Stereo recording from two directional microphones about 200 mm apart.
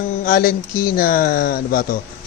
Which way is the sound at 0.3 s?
45° left (ahead or behind).